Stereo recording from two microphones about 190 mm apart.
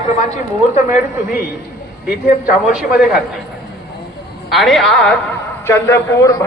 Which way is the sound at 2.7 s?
5° right (ahead or behind).